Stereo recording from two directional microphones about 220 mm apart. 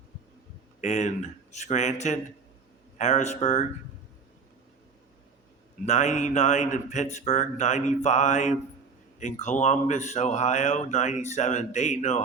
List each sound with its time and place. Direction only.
0.8 s speech: 30° left (ahead or behind)
5.8 s speech: 30° left (ahead or behind)